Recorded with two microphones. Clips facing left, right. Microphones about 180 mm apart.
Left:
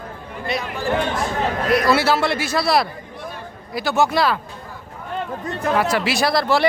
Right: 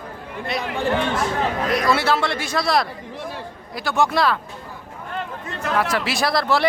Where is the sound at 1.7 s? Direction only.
5° left (ahead or behind).